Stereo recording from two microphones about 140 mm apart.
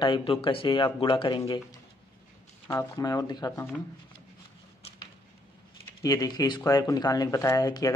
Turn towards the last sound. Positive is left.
turn(degrees=25)  # may be behind; listen again after turning